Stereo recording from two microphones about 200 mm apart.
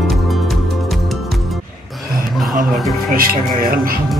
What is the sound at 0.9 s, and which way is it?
Music, centre (ahead or behind).